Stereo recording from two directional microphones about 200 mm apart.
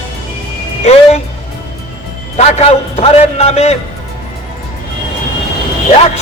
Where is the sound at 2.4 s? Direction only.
35° left (ahead or behind).